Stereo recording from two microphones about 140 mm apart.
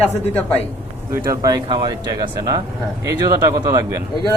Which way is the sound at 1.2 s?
25° right (ahead or behind).